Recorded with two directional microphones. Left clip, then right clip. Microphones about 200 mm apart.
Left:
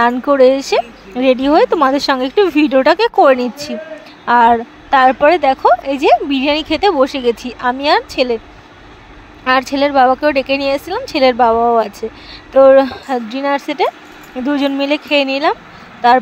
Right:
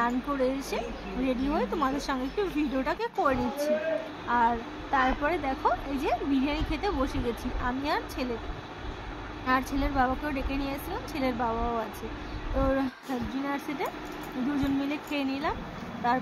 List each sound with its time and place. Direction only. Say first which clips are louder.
0.0 s speech: left 18 dB; 45° left (ahead or behind)
9.5 s speech: left 16 dB; 45° left (ahead or behind)